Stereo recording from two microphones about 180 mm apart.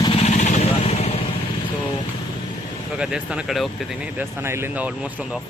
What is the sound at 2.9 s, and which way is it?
Speech, 5° right (ahead or behind).